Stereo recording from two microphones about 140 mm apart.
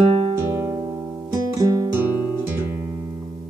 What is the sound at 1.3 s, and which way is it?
Music, 25° right (ahead or behind).